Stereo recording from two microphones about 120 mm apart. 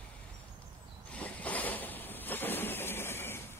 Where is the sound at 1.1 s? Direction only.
10° left (ahead or behind).